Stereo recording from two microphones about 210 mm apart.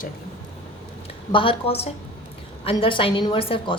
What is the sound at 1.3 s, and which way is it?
A woman's voice, 25° left (ahead or behind).